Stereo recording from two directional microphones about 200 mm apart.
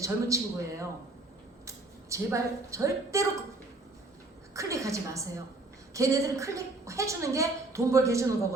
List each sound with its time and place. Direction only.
0.0 s a woman's voice: 15° right (ahead or behind)
4.5 s a woman's voice: 15° right (ahead or behind)